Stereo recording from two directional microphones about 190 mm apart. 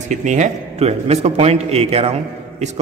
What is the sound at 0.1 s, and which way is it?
A man's voice, 40° right (ahead or behind).